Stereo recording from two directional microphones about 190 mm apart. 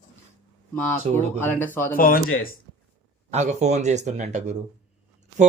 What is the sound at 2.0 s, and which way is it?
Speech, 45° left (ahead or behind).